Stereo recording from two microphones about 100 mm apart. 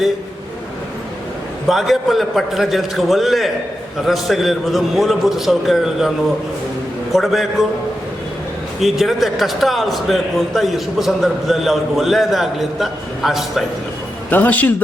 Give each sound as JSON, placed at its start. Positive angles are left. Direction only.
{"t": 1.6, "sound": "a man's voice", "side_deg": 0}
{"t": 8.8, "sound": "a man's voice", "side_deg": 0}
{"t": 14.3, "sound": "a man's voice", "side_deg": 15}